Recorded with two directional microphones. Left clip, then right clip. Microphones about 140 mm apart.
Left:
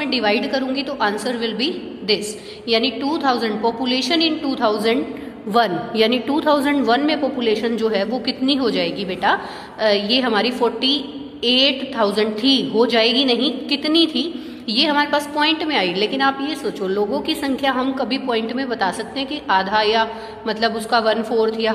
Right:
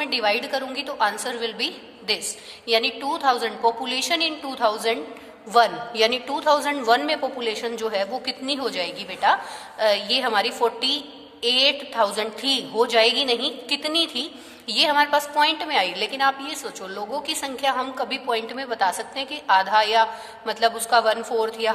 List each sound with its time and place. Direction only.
0.0 s a woman's voice: 40° right (ahead or behind)